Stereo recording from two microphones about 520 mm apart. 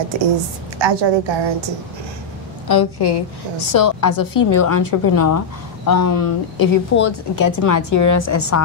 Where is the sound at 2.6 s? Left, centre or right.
Left.